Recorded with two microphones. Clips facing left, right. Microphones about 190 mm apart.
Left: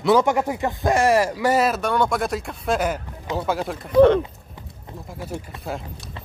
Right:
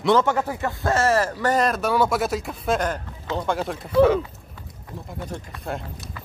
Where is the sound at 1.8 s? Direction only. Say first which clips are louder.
Even; 5° right (ahead or behind).